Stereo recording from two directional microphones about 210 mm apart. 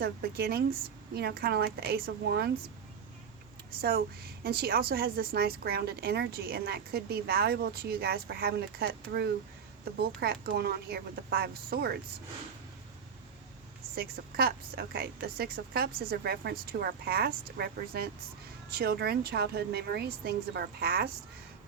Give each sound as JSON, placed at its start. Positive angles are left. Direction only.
{"t": 0.0, "sound": "a woman's voice", "side_deg": -50}
{"t": 3.8, "sound": "a woman's voice", "side_deg": -45}
{"t": 13.9, "sound": "a woman's voice", "side_deg": -45}